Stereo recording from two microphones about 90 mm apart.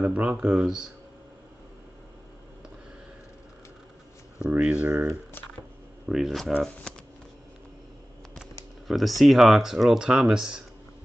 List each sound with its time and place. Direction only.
0.0 s speech: 15° right (ahead or behind)
4.5 s speech: 15° right (ahead or behind)
6.0 s speech: centre (ahead or behind)
8.8 s speech: centre (ahead or behind)